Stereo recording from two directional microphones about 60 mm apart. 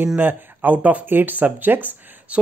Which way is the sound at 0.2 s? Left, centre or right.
Right.